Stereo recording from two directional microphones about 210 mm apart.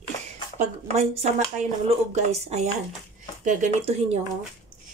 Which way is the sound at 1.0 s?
35° right (ahead or behind).